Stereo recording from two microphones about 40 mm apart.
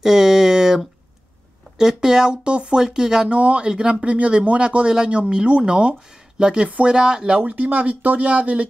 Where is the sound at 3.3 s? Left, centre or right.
Right.